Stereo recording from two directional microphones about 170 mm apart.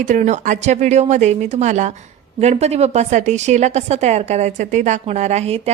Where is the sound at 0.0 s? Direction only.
45° right (ahead or behind).